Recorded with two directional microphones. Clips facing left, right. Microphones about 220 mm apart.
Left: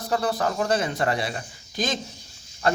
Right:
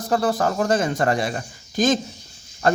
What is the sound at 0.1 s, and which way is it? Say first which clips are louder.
Speech: right 4 dB; 45° right (ahead or behind).